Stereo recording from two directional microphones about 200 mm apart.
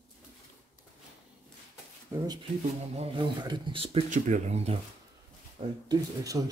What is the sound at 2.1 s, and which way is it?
Speech, 15° right (ahead or behind).